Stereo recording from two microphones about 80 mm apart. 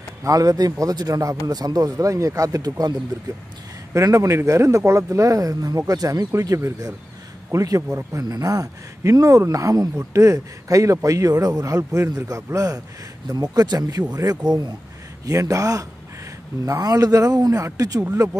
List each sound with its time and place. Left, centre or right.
0.2 s a man's voice: right
3.9 s a man's voice: right